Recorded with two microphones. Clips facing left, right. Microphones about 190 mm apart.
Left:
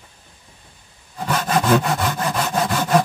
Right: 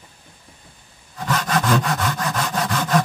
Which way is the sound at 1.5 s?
5° left (ahead or behind).